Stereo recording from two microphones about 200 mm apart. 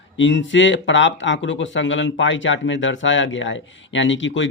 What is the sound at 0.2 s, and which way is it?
Speech, 65° left (ahead or behind).